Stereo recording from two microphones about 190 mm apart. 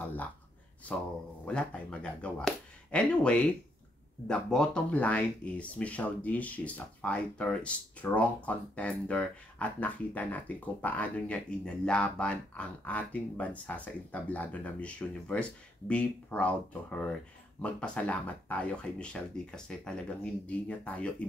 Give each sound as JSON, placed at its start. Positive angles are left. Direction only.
{"t": 1.4, "sound": "speech", "side_deg": 5}